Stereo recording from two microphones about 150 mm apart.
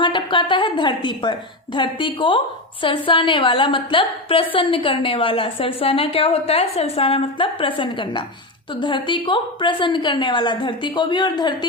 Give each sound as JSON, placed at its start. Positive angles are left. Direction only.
{"t": 0.0, "sound": "a woman's voice", "side_deg": 35}